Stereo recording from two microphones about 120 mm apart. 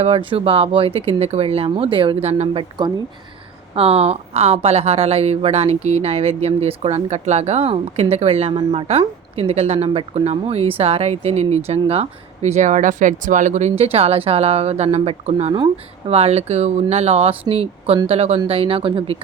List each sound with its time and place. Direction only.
0.0 s speech: 50° right (ahead or behind)
3.8 s a woman's voice: 55° right (ahead or behind)
15.5 s a woman's voice: 50° right (ahead or behind)